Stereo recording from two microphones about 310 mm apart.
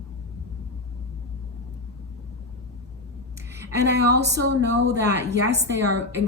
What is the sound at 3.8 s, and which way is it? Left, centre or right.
Speech, right.